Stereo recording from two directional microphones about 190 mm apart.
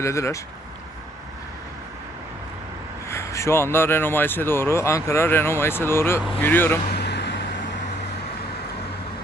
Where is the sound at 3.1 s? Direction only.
15° left (ahead or behind).